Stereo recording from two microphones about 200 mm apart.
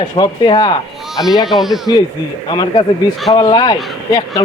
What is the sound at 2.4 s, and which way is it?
Speech, 20° left (ahead or behind).